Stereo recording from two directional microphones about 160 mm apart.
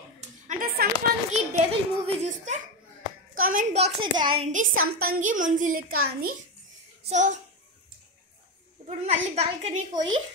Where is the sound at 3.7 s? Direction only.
40° right (ahead or behind).